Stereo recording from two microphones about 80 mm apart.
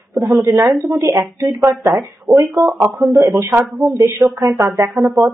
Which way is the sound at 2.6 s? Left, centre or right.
Right.